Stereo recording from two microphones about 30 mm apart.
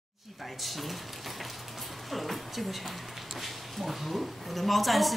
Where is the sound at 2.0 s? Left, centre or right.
Centre.